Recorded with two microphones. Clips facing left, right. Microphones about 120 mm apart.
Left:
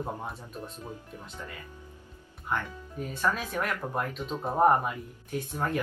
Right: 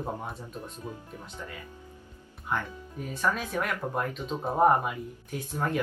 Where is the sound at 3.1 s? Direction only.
Centre (ahead or behind).